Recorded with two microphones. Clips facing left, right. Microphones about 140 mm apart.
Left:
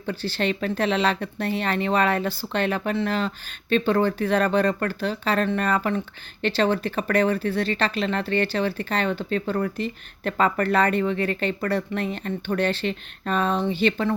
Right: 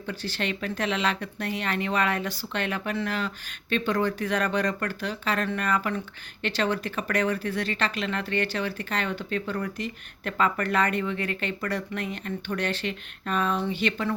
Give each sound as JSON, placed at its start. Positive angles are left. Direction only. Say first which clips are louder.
{"t": 0.0, "sound": "speech", "louder": "left 5 dB", "side_deg": 30}